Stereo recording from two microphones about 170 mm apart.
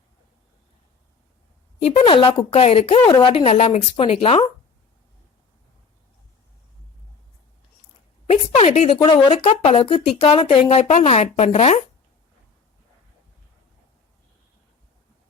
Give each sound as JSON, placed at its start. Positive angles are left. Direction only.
{"t": 1.8, "sound": "a woman's voice", "side_deg": 35}
{"t": 8.3, "sound": "a sound", "side_deg": 40}
{"t": 9.3, "sound": "a woman's voice", "side_deg": 40}